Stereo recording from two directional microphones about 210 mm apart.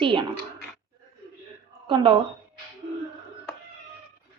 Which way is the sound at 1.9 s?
25° right (ahead or behind).